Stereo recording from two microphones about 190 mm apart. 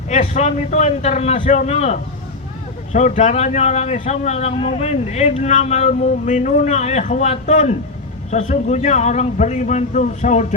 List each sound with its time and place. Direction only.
0.1 s a man's voice: 35° left (ahead or behind)